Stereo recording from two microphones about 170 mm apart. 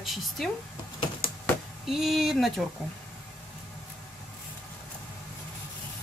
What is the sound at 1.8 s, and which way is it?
Speech, centre (ahead or behind).